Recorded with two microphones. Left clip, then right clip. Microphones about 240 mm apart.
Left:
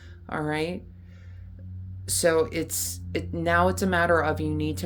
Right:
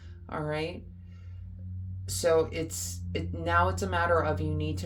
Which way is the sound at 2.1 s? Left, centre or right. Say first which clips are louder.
Left 3 dB; left.